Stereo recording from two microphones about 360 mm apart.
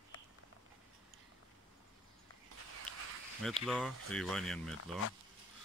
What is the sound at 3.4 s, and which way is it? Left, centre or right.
Speech, centre.